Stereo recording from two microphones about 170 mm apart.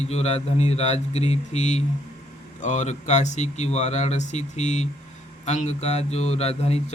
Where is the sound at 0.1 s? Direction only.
40° left (ahead or behind).